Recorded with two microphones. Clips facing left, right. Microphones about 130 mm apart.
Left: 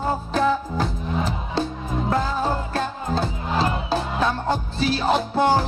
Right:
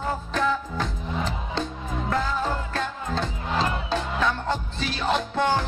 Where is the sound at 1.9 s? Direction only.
30° left (ahead or behind).